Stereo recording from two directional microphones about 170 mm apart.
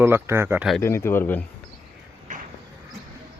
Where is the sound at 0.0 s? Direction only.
15° right (ahead or behind).